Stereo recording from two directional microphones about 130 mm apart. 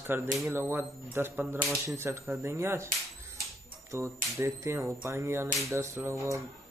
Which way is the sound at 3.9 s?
20° right (ahead or behind).